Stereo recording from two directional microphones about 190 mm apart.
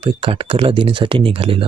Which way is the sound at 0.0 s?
30° right (ahead or behind).